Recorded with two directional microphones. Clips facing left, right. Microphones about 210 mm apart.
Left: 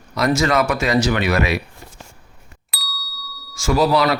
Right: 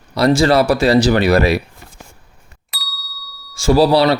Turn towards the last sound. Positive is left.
turn(degrees=-30)  # may be behind; listen again after turning